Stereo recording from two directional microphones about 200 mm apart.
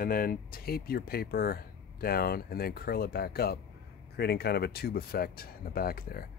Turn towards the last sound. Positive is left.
turn(degrees=45)  # may be behind; listen again after turning